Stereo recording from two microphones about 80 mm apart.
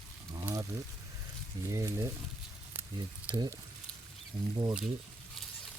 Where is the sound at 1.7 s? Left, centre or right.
Right.